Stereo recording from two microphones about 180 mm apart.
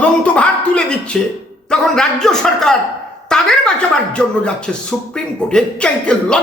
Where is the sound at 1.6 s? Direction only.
5° left (ahead or behind).